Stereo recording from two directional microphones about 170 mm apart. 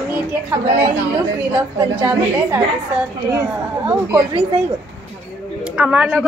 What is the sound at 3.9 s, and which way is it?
Speech, 15° right (ahead or behind).